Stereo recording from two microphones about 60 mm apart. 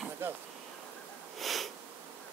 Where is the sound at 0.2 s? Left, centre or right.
Right.